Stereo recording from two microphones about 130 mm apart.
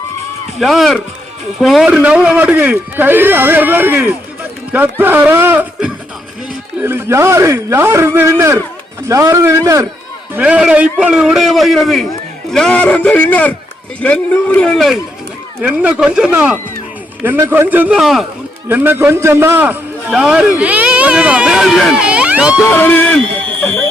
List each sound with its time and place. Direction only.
0.6 s a man's voice: centre (ahead or behind); by 9.8 s 25° right (ahead or behind)
10.3 s a man's voice: 10° right (ahead or behind)
15.6 s a man's voice: 10° right (ahead or behind)
18.7 s a man's voice: 15° right (ahead or behind)
22.7 s speech: 15° left (ahead or behind)